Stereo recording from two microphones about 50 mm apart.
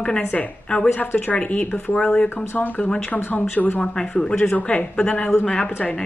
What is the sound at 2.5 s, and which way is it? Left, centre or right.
Speech, left.